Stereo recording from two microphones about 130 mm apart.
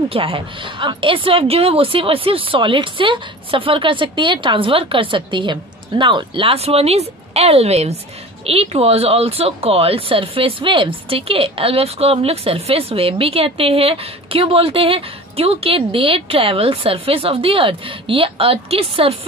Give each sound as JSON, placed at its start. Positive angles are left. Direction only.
{"t": 0.1, "sound": "speech", "side_deg": -45}